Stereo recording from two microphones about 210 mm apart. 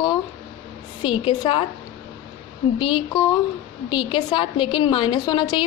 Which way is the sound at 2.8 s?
20° left (ahead or behind).